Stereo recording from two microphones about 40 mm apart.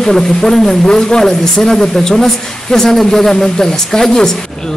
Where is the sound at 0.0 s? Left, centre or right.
Centre.